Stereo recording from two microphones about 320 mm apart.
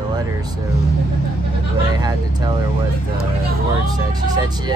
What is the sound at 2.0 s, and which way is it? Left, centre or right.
Speech, centre.